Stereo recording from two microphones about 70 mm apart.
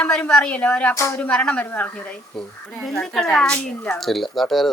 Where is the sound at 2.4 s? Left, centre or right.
Centre.